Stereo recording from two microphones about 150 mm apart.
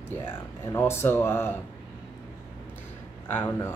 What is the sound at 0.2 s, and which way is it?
Speech, 15° left (ahead or behind).